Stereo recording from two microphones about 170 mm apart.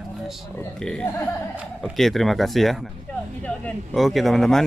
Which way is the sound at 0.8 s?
5° left (ahead or behind).